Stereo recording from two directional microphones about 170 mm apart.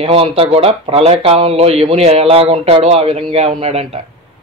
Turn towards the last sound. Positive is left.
turn(degrees=-35)  # may be behind; listen again after turning